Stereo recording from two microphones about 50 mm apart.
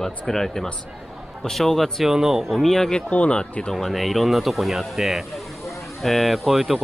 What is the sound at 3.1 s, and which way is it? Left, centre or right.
Speech, left.